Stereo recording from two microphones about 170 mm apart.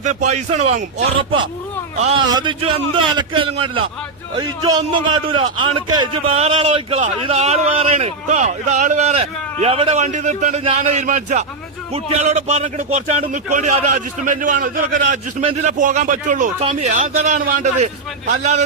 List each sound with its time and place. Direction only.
0.0 s a man's voice: 45° right (ahead or behind)
2.3 s a man's voice: 30° right (ahead or behind); by 18.5 s 45° right (ahead or behind)